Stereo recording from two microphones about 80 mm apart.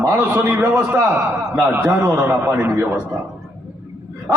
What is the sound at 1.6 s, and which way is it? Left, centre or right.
Speech, right.